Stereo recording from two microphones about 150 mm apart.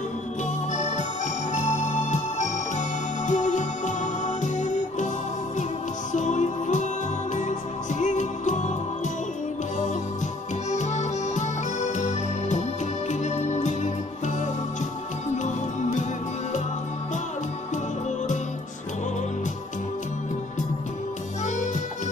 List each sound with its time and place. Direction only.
0.7 s music: 50° left (ahead or behind)
6.1 s music: 55° left (ahead or behind)
10.7 s music: 50° left (ahead or behind)